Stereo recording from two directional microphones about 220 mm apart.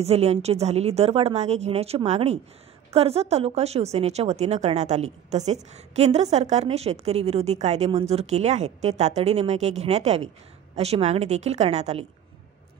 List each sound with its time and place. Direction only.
0.0 s speech: 30° right (ahead or behind)